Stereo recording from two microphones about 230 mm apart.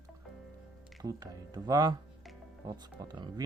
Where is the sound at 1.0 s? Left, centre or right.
Centre.